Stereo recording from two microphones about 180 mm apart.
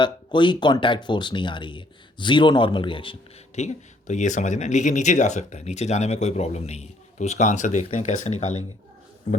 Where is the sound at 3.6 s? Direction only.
40° left (ahead or behind).